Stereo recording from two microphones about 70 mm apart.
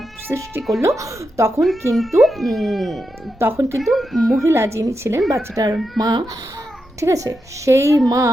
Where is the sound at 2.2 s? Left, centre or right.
Centre.